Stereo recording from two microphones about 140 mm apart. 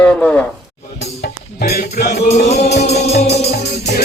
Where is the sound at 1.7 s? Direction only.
60° left (ahead or behind).